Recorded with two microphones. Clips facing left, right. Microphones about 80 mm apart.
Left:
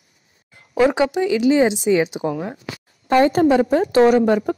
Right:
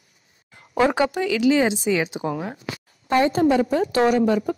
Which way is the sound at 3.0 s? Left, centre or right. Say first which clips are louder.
Left 4 dB; left.